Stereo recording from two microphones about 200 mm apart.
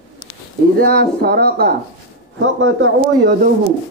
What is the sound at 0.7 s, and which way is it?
Speech, 50° right (ahead or behind).